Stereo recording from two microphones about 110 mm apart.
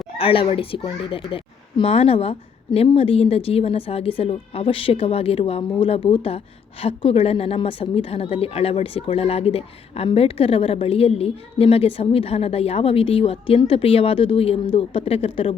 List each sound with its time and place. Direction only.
0.2 s a woman's voice: 55° left (ahead or behind)
1.8 s a woman's voice: 65° left (ahead or behind)